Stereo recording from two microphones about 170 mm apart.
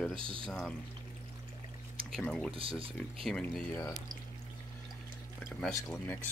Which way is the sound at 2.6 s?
35° right (ahead or behind).